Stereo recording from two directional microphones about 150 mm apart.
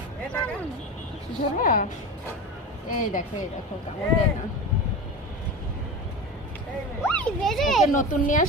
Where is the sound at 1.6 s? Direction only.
70° left (ahead or behind).